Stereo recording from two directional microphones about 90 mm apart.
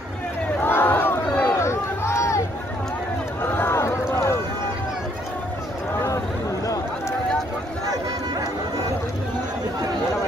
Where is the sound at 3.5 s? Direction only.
30° left (ahead or behind).